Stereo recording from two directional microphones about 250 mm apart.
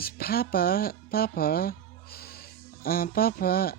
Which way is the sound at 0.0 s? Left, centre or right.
Left.